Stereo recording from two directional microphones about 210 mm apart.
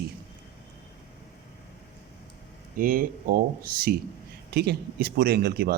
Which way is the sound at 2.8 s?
40° right (ahead or behind).